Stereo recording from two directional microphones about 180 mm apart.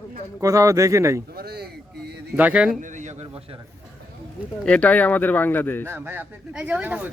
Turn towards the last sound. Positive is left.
turn(degrees=-10)  # may be behind; listen again after turning